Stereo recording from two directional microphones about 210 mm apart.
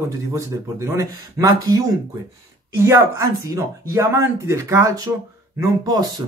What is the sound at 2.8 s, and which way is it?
Speech, 15° right (ahead or behind).